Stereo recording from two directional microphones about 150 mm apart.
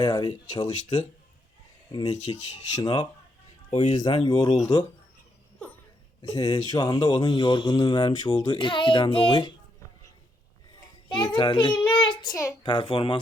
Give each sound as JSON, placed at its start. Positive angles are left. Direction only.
{"t": 0.0, "sound": "speech", "side_deg": 25}
{"t": 3.7, "sound": "speech", "side_deg": 50}
{"t": 4.0, "sound": "speech", "side_deg": 30}
{"t": 6.2, "sound": "speech", "side_deg": 25}
{"t": 11.1, "sound": "a child's voice", "side_deg": 35}
{"t": 12.6, "sound": "a child's voice", "side_deg": 35}